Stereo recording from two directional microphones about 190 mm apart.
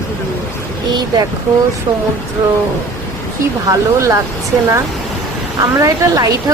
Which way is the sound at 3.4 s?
15° right (ahead or behind).